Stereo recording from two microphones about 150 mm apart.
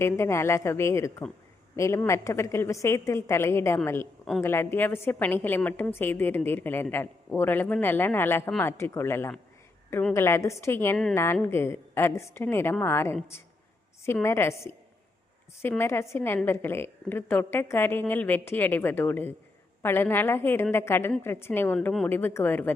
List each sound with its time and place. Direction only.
0.0 s a man's voice: 20° left (ahead or behind)
15.8 s a man's voice: 15° left (ahead or behind)